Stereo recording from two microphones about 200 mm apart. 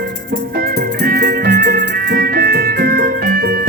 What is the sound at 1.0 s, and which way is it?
Music, 45° right (ahead or behind).